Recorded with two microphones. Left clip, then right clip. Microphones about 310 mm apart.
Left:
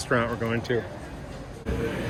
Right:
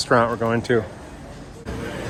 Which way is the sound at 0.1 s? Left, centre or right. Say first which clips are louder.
Right 7 dB; centre.